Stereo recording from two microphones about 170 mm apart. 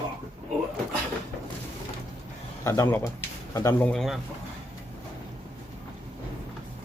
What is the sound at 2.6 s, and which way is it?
Speech, 15° left (ahead or behind).